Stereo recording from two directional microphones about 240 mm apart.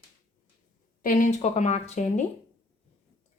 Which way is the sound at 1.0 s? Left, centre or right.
Left.